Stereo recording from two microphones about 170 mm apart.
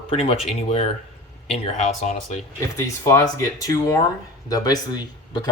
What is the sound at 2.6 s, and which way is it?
Speech, 15° left (ahead or behind).